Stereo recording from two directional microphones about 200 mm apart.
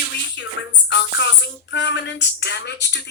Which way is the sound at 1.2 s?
60° left (ahead or behind).